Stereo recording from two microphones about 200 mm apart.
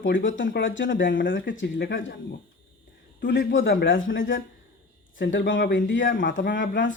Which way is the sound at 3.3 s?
65° left (ahead or behind).